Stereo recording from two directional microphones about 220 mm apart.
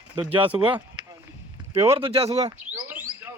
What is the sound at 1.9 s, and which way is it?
Speech, 25° right (ahead or behind).